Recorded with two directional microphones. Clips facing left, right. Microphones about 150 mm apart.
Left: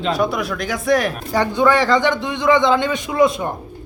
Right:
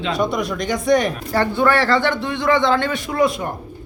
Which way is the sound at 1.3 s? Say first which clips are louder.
Left 2 dB; 15° left (ahead or behind).